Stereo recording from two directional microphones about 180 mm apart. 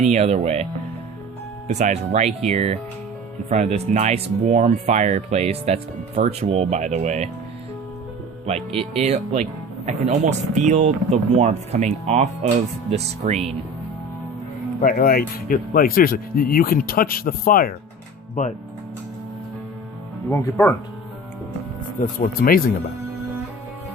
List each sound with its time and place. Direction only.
0.0 s speech: 35° right (ahead or behind)
8.4 s speech: 35° right (ahead or behind)
14.8 s speech: 50° left (ahead or behind)
20.3 s speech: 10° left (ahead or behind)
22.2 s speech: 55° left (ahead or behind)